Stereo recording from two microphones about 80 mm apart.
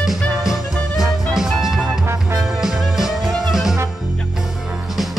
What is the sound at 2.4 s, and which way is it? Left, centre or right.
Music, centre.